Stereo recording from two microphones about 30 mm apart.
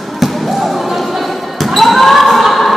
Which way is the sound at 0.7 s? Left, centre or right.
Centre.